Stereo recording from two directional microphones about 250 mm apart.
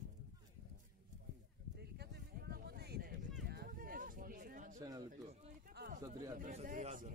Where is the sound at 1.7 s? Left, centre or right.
Right.